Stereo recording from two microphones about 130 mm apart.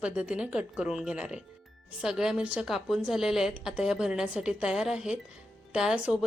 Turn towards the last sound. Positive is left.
turn(degrees=-10)  # may be behind; listen again after turning